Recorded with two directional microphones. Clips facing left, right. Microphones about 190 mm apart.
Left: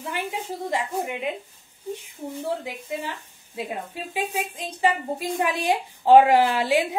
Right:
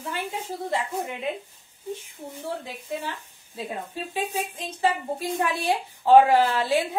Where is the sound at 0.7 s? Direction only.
15° left (ahead or behind).